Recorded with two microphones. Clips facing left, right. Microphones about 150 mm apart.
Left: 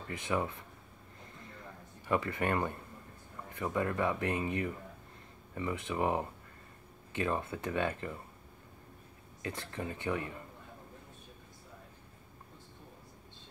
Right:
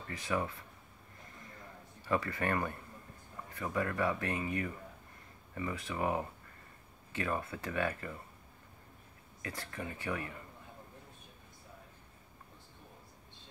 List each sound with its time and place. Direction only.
0.1 s speech: 20° left (ahead or behind)
2.0 s speech: 20° left (ahead or behind)
9.4 s speech: 25° left (ahead or behind)